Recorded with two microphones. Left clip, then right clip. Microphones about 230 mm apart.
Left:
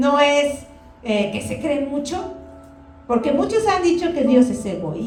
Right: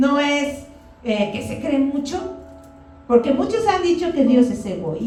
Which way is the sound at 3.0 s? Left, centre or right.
Left.